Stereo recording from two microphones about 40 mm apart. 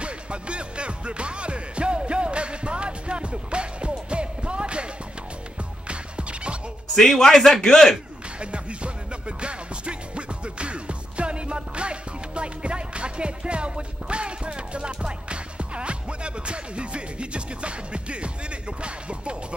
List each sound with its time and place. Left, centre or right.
0.0 s music: right
7.0 s a man's voice: centre
8.4 s music: right